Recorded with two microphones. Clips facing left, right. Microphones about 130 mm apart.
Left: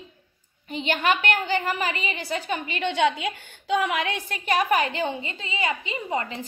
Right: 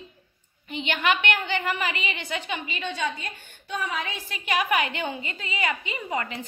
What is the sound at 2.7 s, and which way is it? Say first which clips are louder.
A woman's voice: left 9 dB; 70° left (ahead or behind).